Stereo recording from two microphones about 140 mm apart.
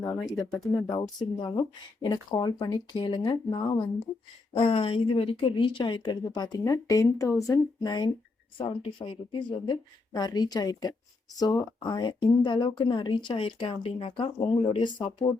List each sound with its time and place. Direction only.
0.9 s speech: 30° left (ahead or behind)
4.5 s speech: 40° left (ahead or behind)